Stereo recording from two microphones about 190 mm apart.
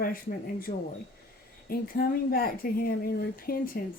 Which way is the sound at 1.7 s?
50° left (ahead or behind).